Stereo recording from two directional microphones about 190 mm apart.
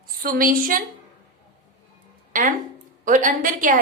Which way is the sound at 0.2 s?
50° right (ahead or behind).